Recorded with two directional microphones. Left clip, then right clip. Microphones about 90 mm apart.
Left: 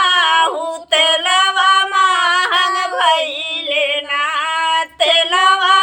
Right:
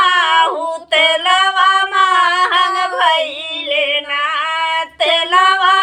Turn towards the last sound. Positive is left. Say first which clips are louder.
# right 1 dB
turn(degrees=20)  # may be behind; listen again after turning